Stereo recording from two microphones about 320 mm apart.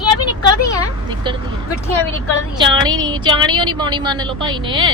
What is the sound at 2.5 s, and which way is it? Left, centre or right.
Speech, centre.